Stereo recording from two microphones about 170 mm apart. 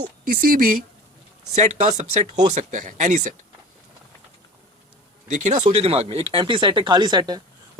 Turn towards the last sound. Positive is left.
turn(degrees=-25)  # may be behind; listen again after turning